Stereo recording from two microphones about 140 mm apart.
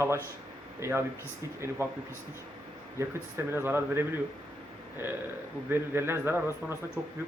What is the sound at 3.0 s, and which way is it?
Speech, 20° right (ahead or behind).